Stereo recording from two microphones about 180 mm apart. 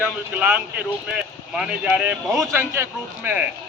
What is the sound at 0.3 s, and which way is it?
A man's voice, 10° right (ahead or behind).